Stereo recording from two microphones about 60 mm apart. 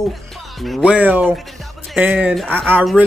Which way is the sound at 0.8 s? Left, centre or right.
Right.